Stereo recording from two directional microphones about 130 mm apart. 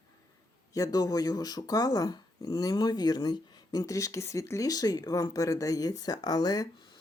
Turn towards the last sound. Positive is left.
turn(degrees=35)  # may be behind; listen again after turning